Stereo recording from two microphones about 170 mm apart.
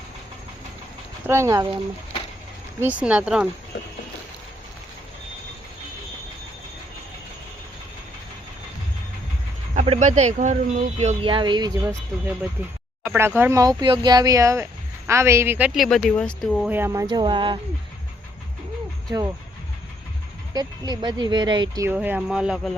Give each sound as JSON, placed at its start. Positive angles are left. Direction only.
{"t": 1.3, "sound": "speech", "side_deg": -15}
{"t": 2.9, "sound": "speech", "side_deg": -5}
{"t": 9.7, "sound": "speech", "side_deg": -40}
{"t": 13.1, "sound": "speech", "side_deg": -15}
{"t": 16.6, "sound": "speech", "side_deg": -15}
{"t": 20.5, "sound": "speech", "side_deg": -25}
{"t": 21.8, "sound": "speech", "side_deg": -10}